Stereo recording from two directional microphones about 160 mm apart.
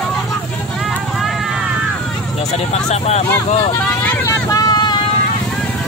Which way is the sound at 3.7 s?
10° left (ahead or behind).